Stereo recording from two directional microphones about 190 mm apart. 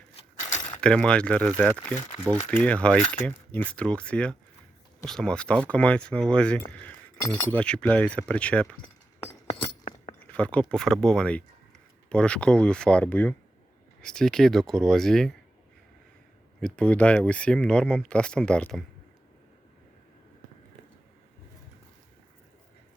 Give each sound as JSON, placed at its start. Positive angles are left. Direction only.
{"t": 0.5, "sound": "coin", "side_deg": 40}
{"t": 0.8, "sound": "speech", "side_deg": 5}
{"t": 10.3, "sound": "speech", "side_deg": 5}
{"t": 16.6, "sound": "speech", "side_deg": 5}